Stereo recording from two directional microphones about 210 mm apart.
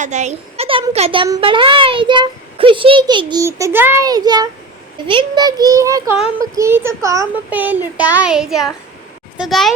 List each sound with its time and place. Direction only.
0.0 s a child's voice: 35° right (ahead or behind); by 9.7 s centre (ahead or behind)